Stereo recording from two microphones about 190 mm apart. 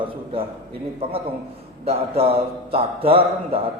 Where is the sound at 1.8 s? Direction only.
30° right (ahead or behind).